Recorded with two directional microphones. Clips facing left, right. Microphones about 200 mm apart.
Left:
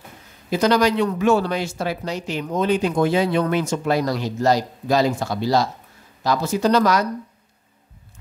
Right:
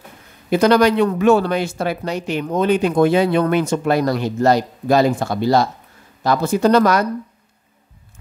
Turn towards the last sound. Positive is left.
turn(degrees=-55)  # may be behind; listen again after turning